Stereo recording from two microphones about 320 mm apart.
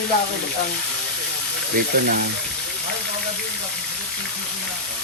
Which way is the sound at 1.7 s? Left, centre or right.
Right.